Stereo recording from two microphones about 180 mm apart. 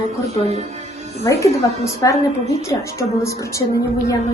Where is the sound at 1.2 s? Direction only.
15° left (ahead or behind).